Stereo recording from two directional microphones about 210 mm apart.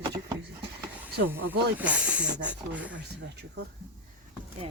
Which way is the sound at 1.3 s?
10° right (ahead or behind).